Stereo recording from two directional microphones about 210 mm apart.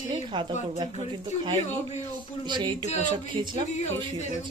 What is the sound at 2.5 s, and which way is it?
Speech, 20° right (ahead or behind).